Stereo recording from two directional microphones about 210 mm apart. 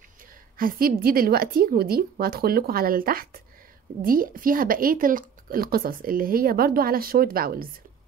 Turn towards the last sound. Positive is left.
turn(degrees=-45)  # may be behind; listen again after turning